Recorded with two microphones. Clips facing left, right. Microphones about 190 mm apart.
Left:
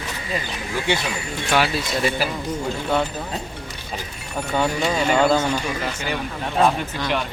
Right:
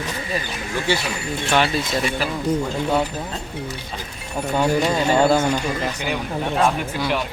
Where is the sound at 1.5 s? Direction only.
5° left (ahead or behind).